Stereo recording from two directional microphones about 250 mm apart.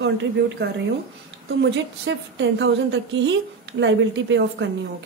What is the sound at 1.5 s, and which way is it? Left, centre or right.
A woman's voice, right.